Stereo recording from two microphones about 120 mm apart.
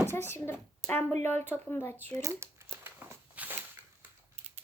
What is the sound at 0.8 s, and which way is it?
A child's voice, 10° left (ahead or behind).